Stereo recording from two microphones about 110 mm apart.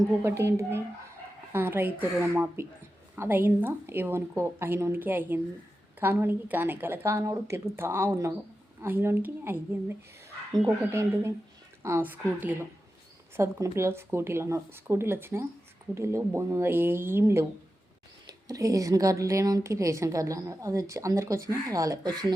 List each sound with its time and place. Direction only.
0.2 s speech: 25° right (ahead or behind)
10.7 s a woman's voice: 25° right (ahead or behind)